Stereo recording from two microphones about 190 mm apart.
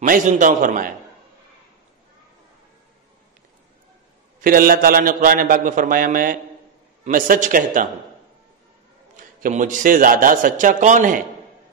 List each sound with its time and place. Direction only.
0.0 s a man's voice: 45° right (ahead or behind)
4.4 s a man's voice: 50° right (ahead or behind)
9.1 s a man's voice: 40° right (ahead or behind)